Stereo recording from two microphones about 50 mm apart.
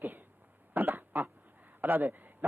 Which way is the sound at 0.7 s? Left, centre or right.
Right.